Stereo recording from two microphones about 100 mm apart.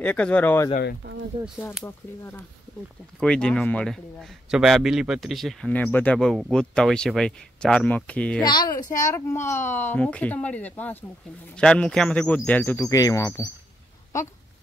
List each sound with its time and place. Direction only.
0.0 s speech: 15° left (ahead or behind)
1.9 s a woman's voice: 20° left (ahead or behind)
3.2 s speech: 10° left (ahead or behind)
5.7 s speech: 15° left (ahead or behind)
6.1 s speech: 5° left (ahead or behind)
8.4 s a woman's voice: 45° left (ahead or behind); by 12.8 s 20° left (ahead or behind)
12.8 s speech: 35° left (ahead or behind)